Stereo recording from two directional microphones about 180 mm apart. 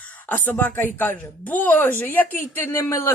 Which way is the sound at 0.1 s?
10° left (ahead or behind).